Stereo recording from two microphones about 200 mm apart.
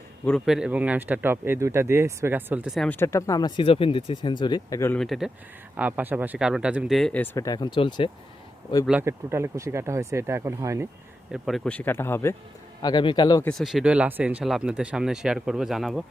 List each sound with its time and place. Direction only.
0.3 s speech: centre (ahead or behind); by 8.1 s 25° left (ahead or behind)
8.9 s speech: 10° right (ahead or behind)
11.3 s speech: centre (ahead or behind); by 13.5 s 20° left (ahead or behind)
13.5 s speech: centre (ahead or behind)